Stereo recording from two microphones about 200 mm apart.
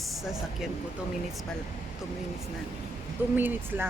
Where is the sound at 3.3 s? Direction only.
10° right (ahead or behind).